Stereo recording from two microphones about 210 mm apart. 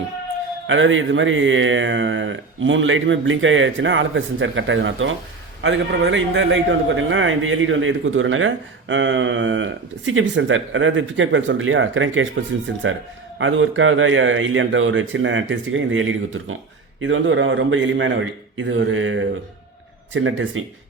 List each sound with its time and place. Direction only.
0.7 s a man's voice: 65° right (ahead or behind)
13.4 s a man's voice: 65° right (ahead or behind)